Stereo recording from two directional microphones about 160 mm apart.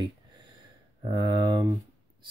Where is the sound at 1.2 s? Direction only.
30° right (ahead or behind).